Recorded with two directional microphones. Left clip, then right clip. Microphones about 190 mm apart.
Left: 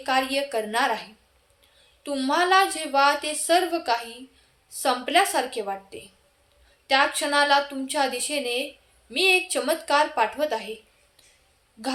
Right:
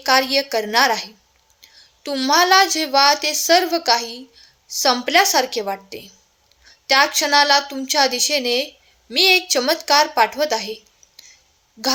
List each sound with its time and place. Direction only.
0.0 s a woman's voice: 45° right (ahead or behind)
2.0 s a woman's voice: 40° right (ahead or behind)